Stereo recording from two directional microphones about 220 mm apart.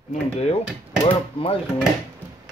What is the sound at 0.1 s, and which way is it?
Dishes, 30° left (ahead or behind).